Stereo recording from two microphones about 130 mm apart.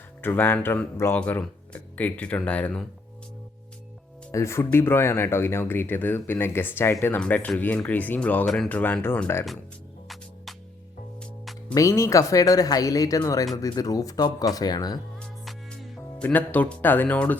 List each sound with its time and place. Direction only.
0.2 s speech: 15° left (ahead or behind)
4.3 s speech: 20° left (ahead or behind)
8.4 s speech: centre (ahead or behind)
8.7 s speech: 15° left (ahead or behind)
11.7 s speech: 25° left (ahead or behind)
15.2 s music: 5° left (ahead or behind)
16.2 s speech: 10° left (ahead or behind)